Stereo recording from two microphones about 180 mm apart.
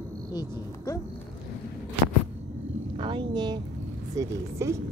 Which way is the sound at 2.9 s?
30° right (ahead or behind).